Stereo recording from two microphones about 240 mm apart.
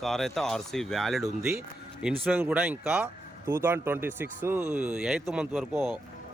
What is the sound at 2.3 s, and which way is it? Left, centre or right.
Speech, centre.